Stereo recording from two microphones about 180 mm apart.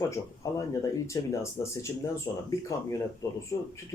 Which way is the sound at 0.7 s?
15° left (ahead or behind).